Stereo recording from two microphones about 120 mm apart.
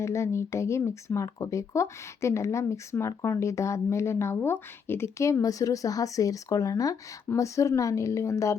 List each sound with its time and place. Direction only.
0.0 s speech: 25° left (ahead or behind)